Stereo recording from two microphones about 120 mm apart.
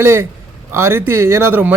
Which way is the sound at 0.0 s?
20° right (ahead or behind).